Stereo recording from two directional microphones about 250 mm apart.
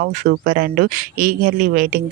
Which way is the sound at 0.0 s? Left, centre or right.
Right.